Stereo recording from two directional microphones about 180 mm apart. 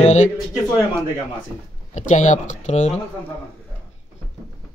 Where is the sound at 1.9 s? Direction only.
40° left (ahead or behind).